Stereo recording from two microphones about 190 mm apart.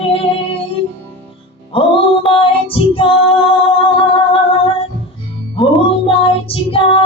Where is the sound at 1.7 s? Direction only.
30° left (ahead or behind).